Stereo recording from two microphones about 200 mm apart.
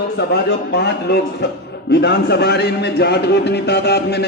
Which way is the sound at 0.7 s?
55° left (ahead or behind).